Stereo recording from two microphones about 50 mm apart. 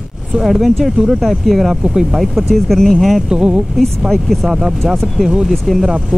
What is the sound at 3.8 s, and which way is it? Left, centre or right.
Speech, centre.